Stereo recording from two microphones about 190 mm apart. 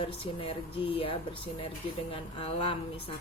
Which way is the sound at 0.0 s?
30° left (ahead or behind).